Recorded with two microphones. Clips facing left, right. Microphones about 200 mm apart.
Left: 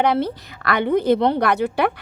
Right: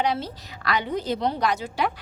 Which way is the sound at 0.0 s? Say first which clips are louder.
Left 7 dB; 60° left (ahead or behind).